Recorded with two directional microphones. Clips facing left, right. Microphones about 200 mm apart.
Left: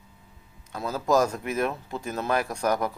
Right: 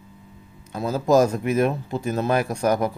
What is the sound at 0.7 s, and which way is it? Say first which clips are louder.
Speech: right 5 dB; 25° right (ahead or behind).